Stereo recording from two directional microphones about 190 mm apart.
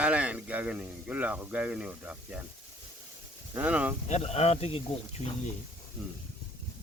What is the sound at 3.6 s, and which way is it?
Speech, 5° right (ahead or behind).